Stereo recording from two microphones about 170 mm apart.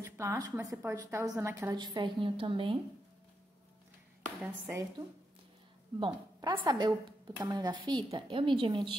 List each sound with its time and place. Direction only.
0.0 s a woman's voice: 15° right (ahead or behind)
4.4 s a woman's voice: 10° right (ahead or behind)
5.9 s speech: 25° right (ahead or behind)